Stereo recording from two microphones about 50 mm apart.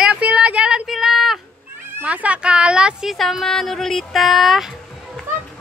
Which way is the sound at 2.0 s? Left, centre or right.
Right.